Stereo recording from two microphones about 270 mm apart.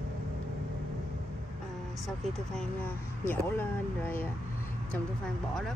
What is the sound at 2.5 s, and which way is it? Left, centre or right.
Speech, centre.